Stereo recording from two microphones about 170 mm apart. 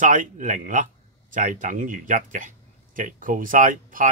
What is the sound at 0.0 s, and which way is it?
Speech, 50° right (ahead or behind).